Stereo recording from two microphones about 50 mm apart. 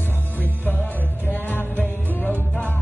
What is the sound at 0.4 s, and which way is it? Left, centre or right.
Music, left.